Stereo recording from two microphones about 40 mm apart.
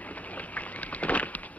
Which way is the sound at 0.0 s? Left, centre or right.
Left.